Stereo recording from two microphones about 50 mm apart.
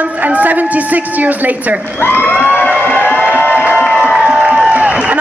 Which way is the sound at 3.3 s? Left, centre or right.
Right.